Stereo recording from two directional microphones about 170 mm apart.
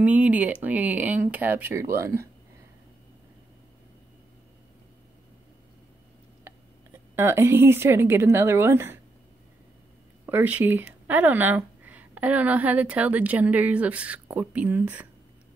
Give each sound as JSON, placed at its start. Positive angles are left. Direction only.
{"t": 0.0, "sound": "speech", "side_deg": -10}
{"t": 6.4, "sound": "speech", "side_deg": -15}
{"t": 10.2, "sound": "speech", "side_deg": -10}